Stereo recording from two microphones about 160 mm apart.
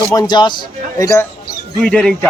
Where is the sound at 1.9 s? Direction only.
5° left (ahead or behind).